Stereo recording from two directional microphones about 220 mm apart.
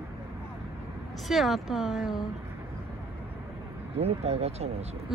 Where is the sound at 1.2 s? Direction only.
Centre (ahead or behind).